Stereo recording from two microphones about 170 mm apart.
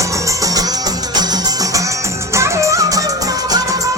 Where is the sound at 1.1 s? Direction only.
25° right (ahead or behind).